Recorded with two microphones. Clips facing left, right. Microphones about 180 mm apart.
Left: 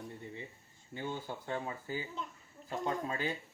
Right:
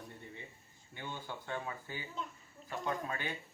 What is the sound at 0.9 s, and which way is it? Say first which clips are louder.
Speech: left 5 dB; 35° left (ahead or behind).